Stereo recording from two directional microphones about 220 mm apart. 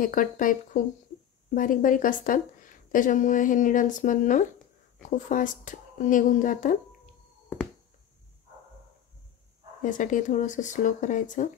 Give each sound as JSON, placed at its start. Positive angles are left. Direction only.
{"t": 0.0, "sound": "speech", "side_deg": 40}
{"t": 9.8, "sound": "speech", "side_deg": 35}